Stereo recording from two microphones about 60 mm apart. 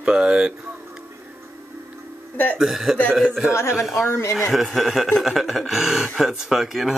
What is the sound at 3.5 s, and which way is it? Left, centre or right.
Speech, left.